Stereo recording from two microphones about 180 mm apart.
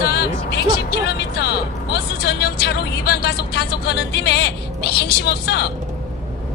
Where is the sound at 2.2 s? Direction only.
65° left (ahead or behind).